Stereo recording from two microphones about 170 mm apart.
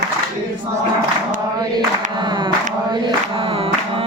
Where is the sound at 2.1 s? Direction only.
25° right (ahead or behind).